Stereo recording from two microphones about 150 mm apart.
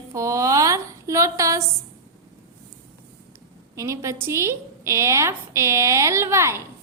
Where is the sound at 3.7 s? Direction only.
20° right (ahead or behind).